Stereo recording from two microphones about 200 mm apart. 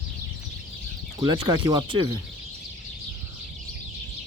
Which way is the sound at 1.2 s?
20° right (ahead or behind).